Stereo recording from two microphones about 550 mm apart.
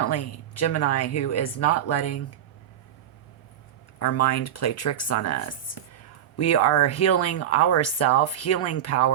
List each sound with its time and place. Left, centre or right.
0.0 s speech: left
4.0 s speech: left